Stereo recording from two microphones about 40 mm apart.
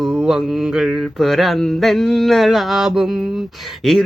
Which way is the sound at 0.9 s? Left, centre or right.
Centre.